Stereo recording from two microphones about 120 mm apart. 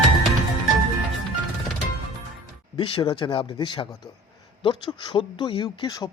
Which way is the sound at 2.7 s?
40° left (ahead or behind).